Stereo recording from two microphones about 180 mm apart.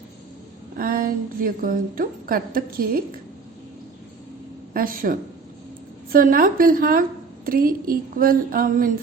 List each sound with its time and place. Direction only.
0.8 s a woman's voice: 50° right (ahead or behind)
4.7 s a woman's voice: 50° right (ahead or behind)